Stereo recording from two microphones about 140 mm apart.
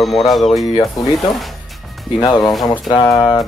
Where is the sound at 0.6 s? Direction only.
25° left (ahead or behind).